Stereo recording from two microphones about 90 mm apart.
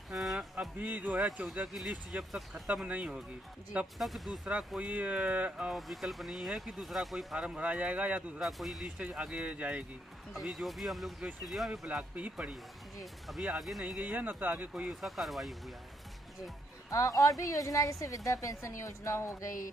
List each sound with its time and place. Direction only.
0.1 s a sound: centre (ahead or behind)
0.7 s speech: 20° right (ahead or behind)
4.0 s speech: centre (ahead or behind)
4.7 s speech: 15° right (ahead or behind)
5.7 s speech: centre (ahead or behind)
7.3 s speech: 10° right (ahead or behind)
8.4 s speech: centre (ahead or behind)
8.9 s speech: 15° right (ahead or behind)
10.3 s speech: 5° right (ahead or behind)
11.8 s speech: 15° right (ahead or behind)
13.0 s speech: centre (ahead or behind)
14.1 s speech: 20° right (ahead or behind)
14.7 s speech: 10° right (ahead or behind)
16.9 s a woman's voice: 40° left (ahead or behind)